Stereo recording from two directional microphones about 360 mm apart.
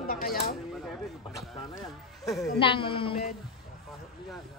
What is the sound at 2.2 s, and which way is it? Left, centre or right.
Speech, centre.